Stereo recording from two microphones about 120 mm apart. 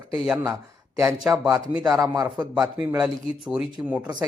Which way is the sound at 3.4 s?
5° right (ahead or behind).